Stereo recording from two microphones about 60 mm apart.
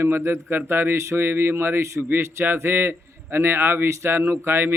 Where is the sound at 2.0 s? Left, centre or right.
Right.